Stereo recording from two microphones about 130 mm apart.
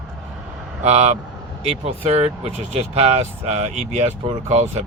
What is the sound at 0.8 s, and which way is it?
Speech, 55° right (ahead or behind).